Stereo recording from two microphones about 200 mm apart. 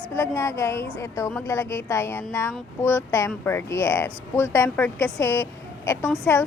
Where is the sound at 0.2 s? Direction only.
15° left (ahead or behind).